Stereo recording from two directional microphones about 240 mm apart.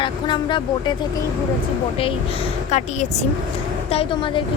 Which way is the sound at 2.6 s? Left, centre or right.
Left.